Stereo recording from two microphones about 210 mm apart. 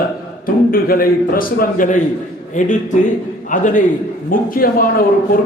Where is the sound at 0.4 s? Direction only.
45° left (ahead or behind).